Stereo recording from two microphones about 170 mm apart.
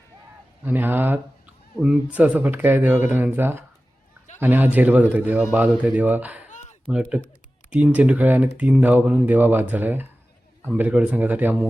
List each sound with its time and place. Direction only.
0.6 s speech: 10° right (ahead or behind)
6.5 s a sound: 45° left (ahead or behind)
6.8 s speech: 5° right (ahead or behind)